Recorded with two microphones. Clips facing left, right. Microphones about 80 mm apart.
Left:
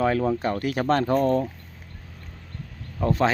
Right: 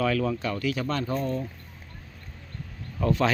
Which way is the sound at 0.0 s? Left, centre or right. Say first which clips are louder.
Left 3 dB; left.